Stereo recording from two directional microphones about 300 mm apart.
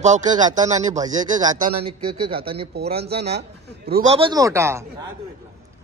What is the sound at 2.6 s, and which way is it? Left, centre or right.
Speech, right.